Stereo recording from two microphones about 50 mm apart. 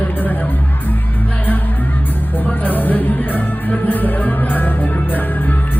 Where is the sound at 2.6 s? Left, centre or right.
Left.